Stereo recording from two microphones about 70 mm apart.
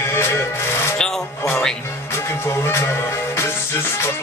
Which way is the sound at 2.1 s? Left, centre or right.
Left.